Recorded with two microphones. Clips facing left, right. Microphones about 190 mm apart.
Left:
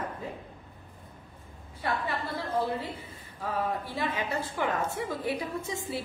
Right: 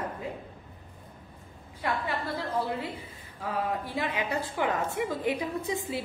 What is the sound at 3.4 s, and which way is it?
A woman's voice, 15° right (ahead or behind).